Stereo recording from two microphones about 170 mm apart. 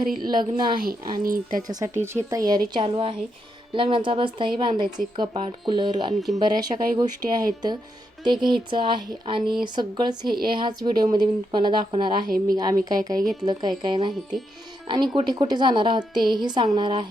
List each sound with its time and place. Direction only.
0.2 s speech: 25° right (ahead or behind)
1.2 s speech: 55° right (ahead or behind)
1.6 s speech: 20° right (ahead or behind)